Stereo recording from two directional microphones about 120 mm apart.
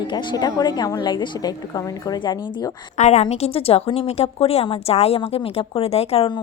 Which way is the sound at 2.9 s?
70° left (ahead or behind).